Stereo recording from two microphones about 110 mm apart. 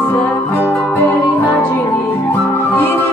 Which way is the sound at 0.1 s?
15° left (ahead or behind).